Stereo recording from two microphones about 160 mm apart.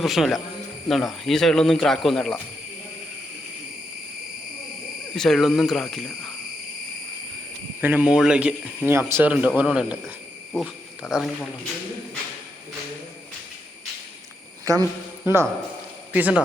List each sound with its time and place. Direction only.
0.0 s speech: centre (ahead or behind)
5.1 s speech: centre (ahead or behind)
7.8 s speech: 10° right (ahead or behind)
14.6 s a sound: 20° right (ahead or behind)
15.2 s speech: 15° right (ahead or behind)